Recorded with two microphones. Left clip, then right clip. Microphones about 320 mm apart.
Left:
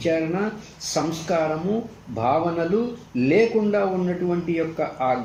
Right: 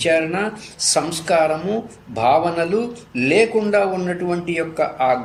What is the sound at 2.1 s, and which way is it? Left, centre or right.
A man's voice, right.